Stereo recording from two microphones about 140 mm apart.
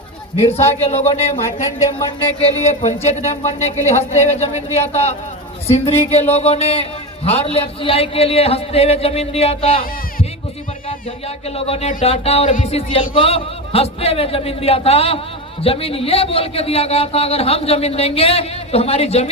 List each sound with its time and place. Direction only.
0.4 s a man's voice: 50° left (ahead or behind)
11.4 s a man's voice: 45° left (ahead or behind)